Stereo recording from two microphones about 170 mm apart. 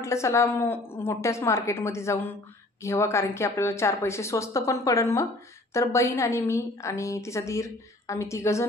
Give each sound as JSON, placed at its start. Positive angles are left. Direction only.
{"t": 0.0, "sound": "a woman's voice", "side_deg": 15}